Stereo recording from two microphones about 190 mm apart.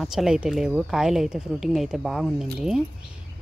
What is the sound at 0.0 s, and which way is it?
Speech, centre (ahead or behind).